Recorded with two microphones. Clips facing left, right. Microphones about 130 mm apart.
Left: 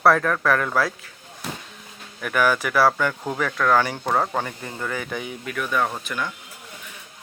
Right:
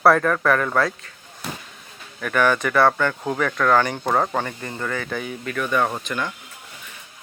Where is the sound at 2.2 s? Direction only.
5° left (ahead or behind).